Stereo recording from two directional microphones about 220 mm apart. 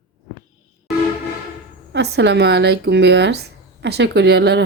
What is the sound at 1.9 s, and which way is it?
Speech, 50° right (ahead or behind).